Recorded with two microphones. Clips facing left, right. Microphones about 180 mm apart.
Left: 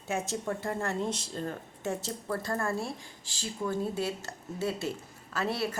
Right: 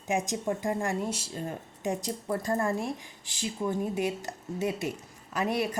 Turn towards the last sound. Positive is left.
turn(degrees=-15)  # may be behind; listen again after turning